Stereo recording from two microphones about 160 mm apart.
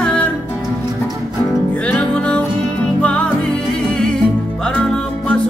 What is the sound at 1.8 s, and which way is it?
Music, 5° left (ahead or behind).